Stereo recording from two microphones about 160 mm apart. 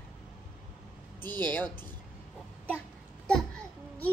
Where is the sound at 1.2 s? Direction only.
25° right (ahead or behind).